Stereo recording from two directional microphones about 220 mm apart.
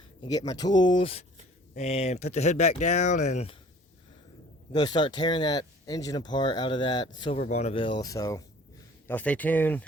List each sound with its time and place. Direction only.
0.2 s speech: 15° left (ahead or behind)
4.7 s speech: 20° left (ahead or behind)